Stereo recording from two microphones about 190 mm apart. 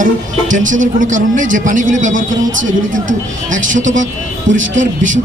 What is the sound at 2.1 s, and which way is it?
Speech, 90° right.